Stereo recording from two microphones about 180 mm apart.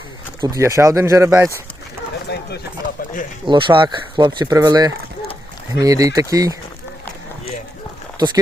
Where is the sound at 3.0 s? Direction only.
50° left (ahead or behind).